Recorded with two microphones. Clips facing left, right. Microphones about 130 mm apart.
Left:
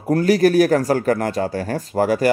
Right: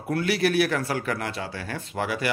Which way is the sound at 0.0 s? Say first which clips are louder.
Left 9 dB; 40° left (ahead or behind).